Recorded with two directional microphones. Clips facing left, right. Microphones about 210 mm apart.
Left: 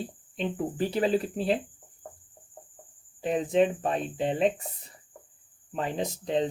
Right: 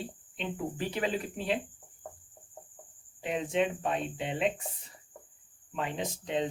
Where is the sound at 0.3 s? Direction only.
35° left (ahead or behind).